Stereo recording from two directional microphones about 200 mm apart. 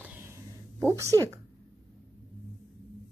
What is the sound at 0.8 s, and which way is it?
Speech, 15° right (ahead or behind).